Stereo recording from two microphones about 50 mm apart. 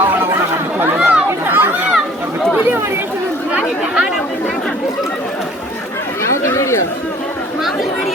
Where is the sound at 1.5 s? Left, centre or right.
Right.